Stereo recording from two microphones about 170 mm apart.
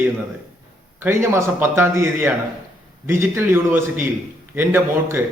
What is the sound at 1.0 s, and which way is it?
A man's voice, 15° right (ahead or behind).